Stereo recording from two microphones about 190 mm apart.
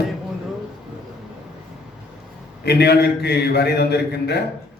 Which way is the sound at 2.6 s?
60° left (ahead or behind).